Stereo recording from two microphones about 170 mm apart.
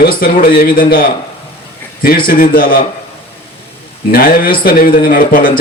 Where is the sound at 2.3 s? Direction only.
60° left (ahead or behind).